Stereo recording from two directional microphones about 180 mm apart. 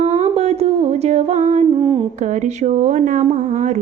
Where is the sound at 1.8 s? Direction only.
25° right (ahead or behind).